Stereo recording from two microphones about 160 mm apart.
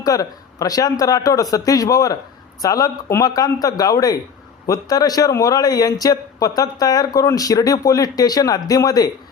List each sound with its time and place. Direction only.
0.0 s a man's voice: 25° left (ahead or behind)